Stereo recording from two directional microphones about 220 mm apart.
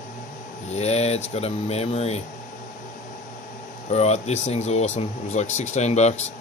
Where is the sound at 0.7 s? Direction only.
30° left (ahead or behind).